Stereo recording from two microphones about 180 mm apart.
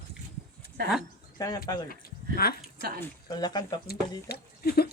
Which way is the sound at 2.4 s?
60° left (ahead or behind).